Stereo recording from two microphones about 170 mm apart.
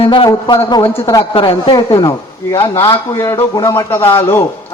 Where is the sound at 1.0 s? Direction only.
30° left (ahead or behind).